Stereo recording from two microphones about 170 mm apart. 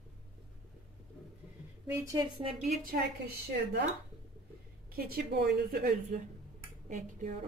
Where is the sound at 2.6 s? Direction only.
60° right (ahead or behind).